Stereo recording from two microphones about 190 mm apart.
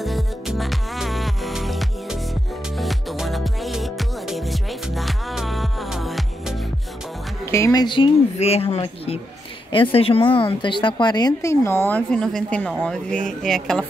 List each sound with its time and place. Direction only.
0.0 s music: centre (ahead or behind)
7.4 s a woman's voice: 15° left (ahead or behind)